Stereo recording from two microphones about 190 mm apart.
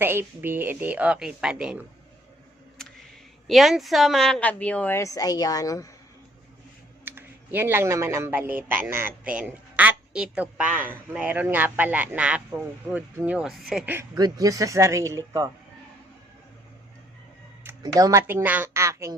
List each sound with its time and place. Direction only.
0.0 s speech: 10° right (ahead or behind)
3.4 s a woman's voice: centre (ahead or behind); by 5.9 s 15° left (ahead or behind)
7.0 s speech: 10° right (ahead or behind)
14.2 s speech: 20° right (ahead or behind)
17.6 s speech: 15° right (ahead or behind)